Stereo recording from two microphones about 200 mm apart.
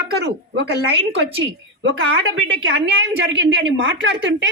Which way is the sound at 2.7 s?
65° right (ahead or behind).